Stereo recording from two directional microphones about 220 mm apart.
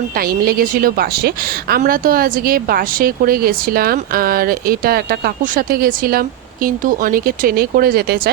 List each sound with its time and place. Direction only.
0.2 s a woman's voice: 45° right (ahead or behind)